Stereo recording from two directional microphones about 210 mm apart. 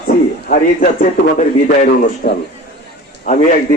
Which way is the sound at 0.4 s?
45° left (ahead or behind).